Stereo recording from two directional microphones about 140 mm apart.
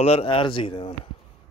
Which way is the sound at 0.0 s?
45° left (ahead or behind).